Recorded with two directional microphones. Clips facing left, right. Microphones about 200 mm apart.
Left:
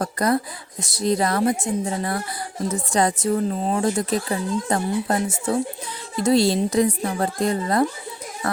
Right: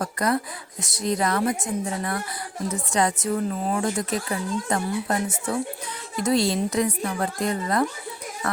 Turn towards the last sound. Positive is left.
turn(degrees=30)  # may be behind; listen again after turning